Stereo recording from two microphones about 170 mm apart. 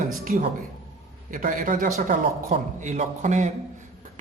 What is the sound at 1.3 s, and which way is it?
A man's voice, 50° right (ahead or behind).